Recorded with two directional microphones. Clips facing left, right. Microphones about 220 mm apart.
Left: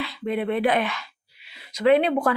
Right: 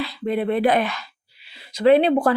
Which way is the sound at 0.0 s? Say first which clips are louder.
Right 3 dB; 35° right (ahead or behind).